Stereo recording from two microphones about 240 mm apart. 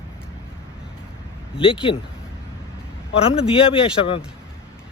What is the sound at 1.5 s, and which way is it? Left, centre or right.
Speech, left.